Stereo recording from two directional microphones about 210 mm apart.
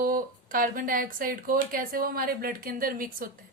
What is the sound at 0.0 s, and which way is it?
A woman's voice, 40° right (ahead or behind).